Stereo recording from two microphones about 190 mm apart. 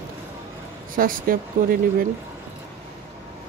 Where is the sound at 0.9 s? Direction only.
50° right (ahead or behind).